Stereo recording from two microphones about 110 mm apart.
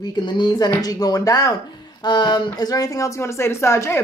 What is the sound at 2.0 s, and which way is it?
Speech, 40° left (ahead or behind).